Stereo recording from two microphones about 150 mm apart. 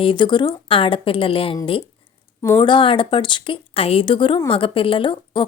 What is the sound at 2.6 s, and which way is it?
Speech, 35° left (ahead or behind).